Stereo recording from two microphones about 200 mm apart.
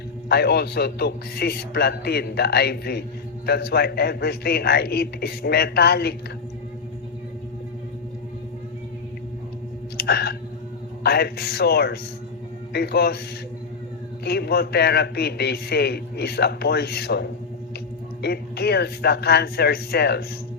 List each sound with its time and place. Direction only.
0.3 s a man's voice: 55° left (ahead or behind)
10.0 s a sound: 50° left (ahead or behind)
11.0 s a man's voice: 55° left (ahead or behind)
14.3 s a man's voice: 55° left (ahead or behind)